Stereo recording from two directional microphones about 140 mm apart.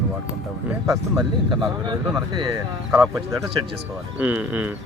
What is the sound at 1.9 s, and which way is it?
Speech, 30° right (ahead or behind).